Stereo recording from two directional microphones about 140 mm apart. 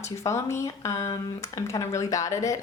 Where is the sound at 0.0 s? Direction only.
20° left (ahead or behind).